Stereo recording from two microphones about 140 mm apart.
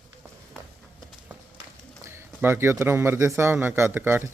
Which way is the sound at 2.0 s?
15° right (ahead or behind).